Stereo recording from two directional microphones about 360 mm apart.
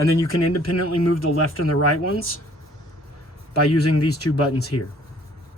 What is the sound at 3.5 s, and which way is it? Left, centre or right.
Speech, left.